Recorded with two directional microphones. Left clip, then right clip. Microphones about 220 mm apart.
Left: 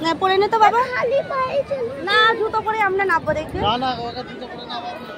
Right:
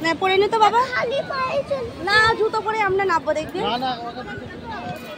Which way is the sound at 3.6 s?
30° left (ahead or behind).